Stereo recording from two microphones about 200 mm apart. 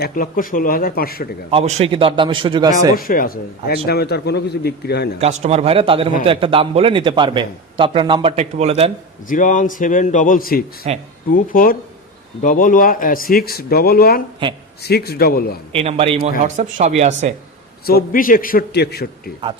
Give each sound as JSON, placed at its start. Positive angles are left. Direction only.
{"t": 0.0, "sound": "speech", "side_deg": 45}
{"t": 1.5, "sound": "a man's voice", "side_deg": -30}
{"t": 2.9, "sound": "speech", "side_deg": 45}
{"t": 5.2, "sound": "a man's voice", "side_deg": -30}
{"t": 9.3, "sound": "a man's voice", "side_deg": 40}
{"t": 10.8, "sound": "speech", "side_deg": -35}
{"t": 11.3, "sound": "speech", "side_deg": 45}
{"t": 14.4, "sound": "a man's voice", "side_deg": -25}
{"t": 14.8, "sound": "speech", "side_deg": 50}
{"t": 15.7, "sound": "a man's voice", "side_deg": -30}
{"t": 17.8, "sound": "speech", "side_deg": 45}